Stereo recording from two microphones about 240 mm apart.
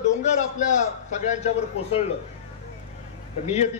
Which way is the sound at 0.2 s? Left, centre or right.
Left.